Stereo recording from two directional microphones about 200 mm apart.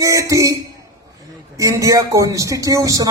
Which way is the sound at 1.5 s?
15° right (ahead or behind).